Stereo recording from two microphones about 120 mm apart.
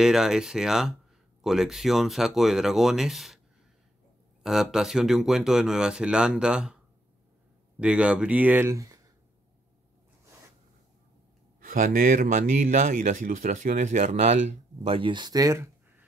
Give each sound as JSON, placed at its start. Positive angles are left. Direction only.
{"t": 0.0, "sound": "speech", "side_deg": -5}
{"t": 4.4, "sound": "speech", "side_deg": -5}
{"t": 7.8, "sound": "speech", "side_deg": -10}
{"t": 11.7, "sound": "speech", "side_deg": -90}